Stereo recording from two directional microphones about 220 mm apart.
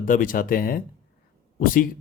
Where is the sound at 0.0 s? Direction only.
40° left (ahead or behind).